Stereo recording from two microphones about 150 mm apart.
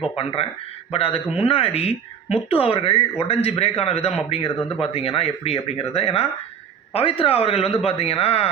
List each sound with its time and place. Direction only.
0.2 s speech: 40° left (ahead or behind)